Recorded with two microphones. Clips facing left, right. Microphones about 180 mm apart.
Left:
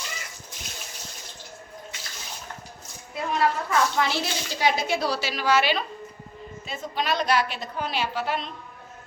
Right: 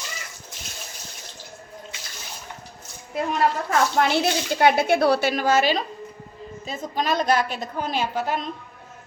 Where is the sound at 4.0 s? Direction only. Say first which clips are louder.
Right 5 dB; 60° right (ahead or behind).